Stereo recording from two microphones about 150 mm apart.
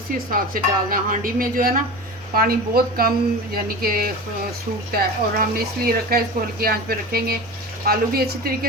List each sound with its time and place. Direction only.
0.3 s dishes: 70° right (ahead or behind)
2.3 s speech: 80° right